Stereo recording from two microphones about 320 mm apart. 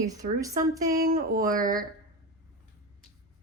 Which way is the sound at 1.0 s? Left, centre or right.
Right.